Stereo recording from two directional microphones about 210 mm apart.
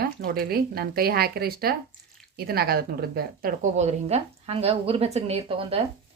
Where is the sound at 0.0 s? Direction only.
45° right (ahead or behind).